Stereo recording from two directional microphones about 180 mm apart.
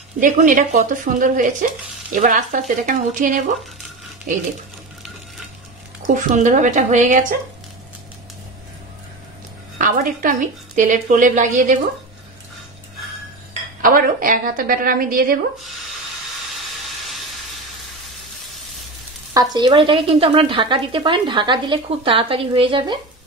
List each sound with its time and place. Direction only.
0.2 s speech: 45° right (ahead or behind)
6.0 s speech: 45° right (ahead or behind)
9.8 s a woman's voice: 45° right (ahead or behind)
13.5 s speech: 50° right (ahead or behind)
19.3 s a woman's voice: 25° right (ahead or behind)